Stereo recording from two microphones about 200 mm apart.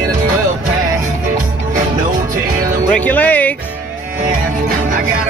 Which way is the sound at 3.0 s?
10° left (ahead or behind).